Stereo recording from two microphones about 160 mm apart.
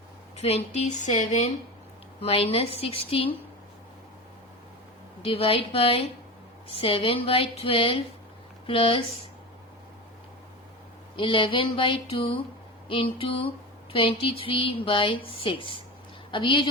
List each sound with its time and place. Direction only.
0.3 s speech: 45° left (ahead or behind)
5.2 s speech: 35° left (ahead or behind)
11.2 s speech: 35° left (ahead or behind)